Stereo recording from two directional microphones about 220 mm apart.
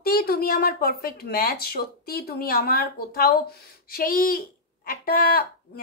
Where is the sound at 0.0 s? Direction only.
45° left (ahead or behind).